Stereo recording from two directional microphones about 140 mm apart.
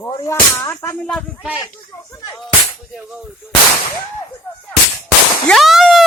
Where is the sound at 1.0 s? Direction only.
Centre (ahead or behind).